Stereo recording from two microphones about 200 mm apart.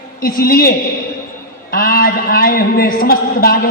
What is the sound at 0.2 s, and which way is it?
Speech, 45° left (ahead or behind).